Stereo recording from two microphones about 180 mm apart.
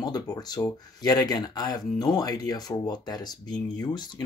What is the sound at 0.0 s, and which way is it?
Speech, 20° left (ahead or behind).